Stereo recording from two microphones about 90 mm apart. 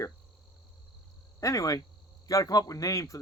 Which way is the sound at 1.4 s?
40° left (ahead or behind).